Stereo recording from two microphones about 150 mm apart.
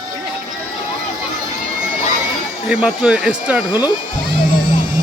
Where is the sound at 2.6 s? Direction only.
5° right (ahead or behind).